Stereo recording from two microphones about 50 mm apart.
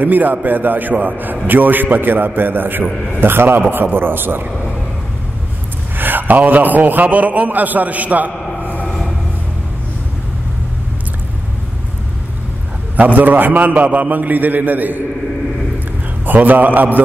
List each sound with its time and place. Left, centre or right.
0.0 s a man's voice: right
5.9 s a man's voice: right
8.8 s a sound: centre
12.9 s a man's voice: right
16.3 s a man's voice: right